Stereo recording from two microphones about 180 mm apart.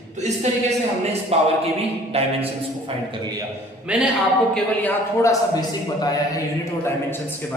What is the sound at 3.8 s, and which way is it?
Speech, 5° right (ahead or behind).